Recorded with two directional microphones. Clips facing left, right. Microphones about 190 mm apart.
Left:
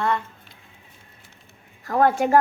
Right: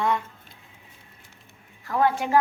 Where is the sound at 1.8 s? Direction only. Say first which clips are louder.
Left 4 dB; 45° left (ahead or behind).